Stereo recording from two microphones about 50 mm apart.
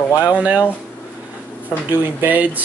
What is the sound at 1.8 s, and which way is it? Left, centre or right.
Speech, right.